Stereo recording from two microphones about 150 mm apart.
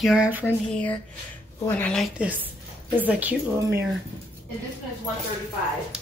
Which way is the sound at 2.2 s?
10° right (ahead or behind).